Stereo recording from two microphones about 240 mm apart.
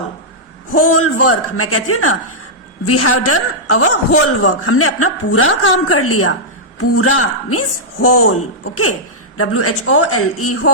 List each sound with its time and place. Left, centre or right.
0.8 s a man's voice: left